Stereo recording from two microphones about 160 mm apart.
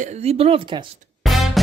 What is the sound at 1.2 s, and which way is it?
Music, centre (ahead or behind).